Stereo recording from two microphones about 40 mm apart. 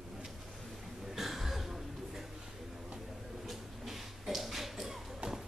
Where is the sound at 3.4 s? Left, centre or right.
Centre.